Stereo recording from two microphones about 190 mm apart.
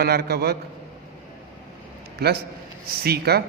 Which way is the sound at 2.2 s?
55° right (ahead or behind).